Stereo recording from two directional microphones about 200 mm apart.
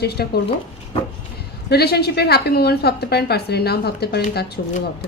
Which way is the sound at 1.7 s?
55° left (ahead or behind).